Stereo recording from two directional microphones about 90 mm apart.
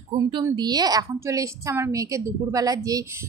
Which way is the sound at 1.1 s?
35° right (ahead or behind).